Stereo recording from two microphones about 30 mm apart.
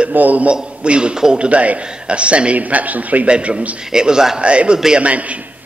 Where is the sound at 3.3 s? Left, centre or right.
Right.